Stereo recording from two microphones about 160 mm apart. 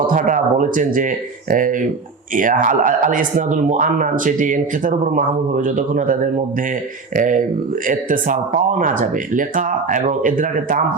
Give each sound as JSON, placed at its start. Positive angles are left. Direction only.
{"t": 0.1, "sound": "speech", "side_deg": -55}
{"t": 7.2, "sound": "speech", "side_deg": -55}